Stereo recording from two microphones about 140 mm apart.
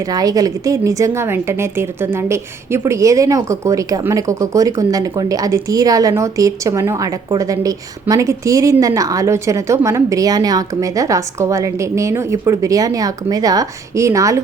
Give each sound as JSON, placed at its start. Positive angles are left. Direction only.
{"t": 0.1, "sound": "a woman's voice", "side_deg": -25}